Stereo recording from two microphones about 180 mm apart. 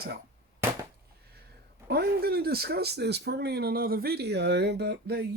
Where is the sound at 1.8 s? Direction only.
60° right (ahead or behind).